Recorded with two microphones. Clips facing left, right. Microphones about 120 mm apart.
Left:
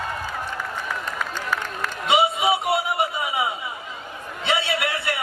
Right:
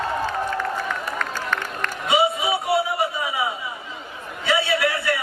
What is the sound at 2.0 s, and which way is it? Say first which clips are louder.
Music: left 1 dB; 20° left (ahead or behind).